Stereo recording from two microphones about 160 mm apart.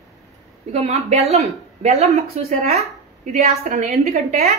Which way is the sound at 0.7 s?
45° right (ahead or behind).